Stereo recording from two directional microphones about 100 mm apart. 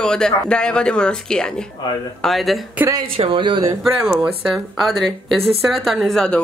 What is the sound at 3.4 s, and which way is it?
Speech, 55° right (ahead or behind).